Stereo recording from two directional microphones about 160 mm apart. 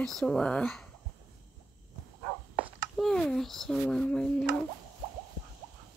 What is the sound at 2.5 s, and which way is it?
Speech, centre (ahead or behind).